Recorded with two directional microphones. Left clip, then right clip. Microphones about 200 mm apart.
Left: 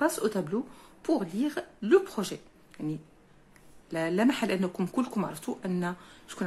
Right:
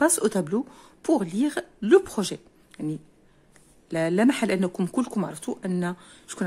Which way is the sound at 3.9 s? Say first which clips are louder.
Right 5 dB; 30° right (ahead or behind).